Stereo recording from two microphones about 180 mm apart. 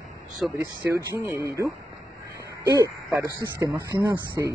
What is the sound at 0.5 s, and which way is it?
Speech, 15° right (ahead or behind).